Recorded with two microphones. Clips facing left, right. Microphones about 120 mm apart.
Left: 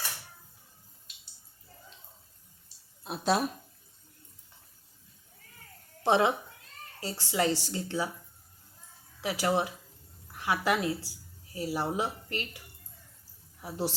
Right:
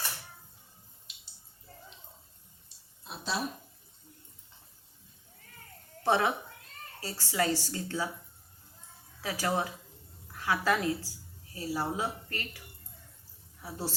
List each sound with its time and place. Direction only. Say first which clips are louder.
3.0 s speech: left 8 dB; 55° left (ahead or behind)
6.0 s a woman's voice: left 2 dB; 20° left (ahead or behind)
9.2 s a woman's voice: left 3 dB; 15° left (ahead or behind)
13.6 s speech: left 4 dB; 20° left (ahead or behind)